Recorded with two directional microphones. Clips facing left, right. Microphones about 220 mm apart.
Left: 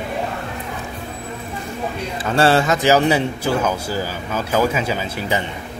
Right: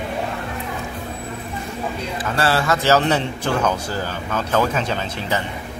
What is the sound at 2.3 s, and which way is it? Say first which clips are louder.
A man's voice: left 5 dB; 25° left (ahead or behind).